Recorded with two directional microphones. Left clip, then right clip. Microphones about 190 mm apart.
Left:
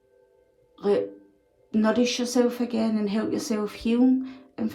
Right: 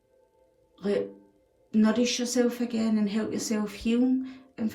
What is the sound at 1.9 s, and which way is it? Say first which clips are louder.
Speech: left 3 dB; 25° left (ahead or behind).